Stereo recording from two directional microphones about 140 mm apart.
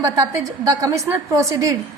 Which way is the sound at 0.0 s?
25° right (ahead or behind).